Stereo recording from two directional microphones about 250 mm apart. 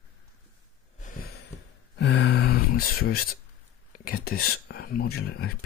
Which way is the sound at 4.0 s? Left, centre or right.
Left.